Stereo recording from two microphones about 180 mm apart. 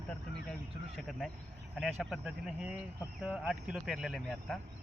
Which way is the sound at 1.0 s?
5° left (ahead or behind).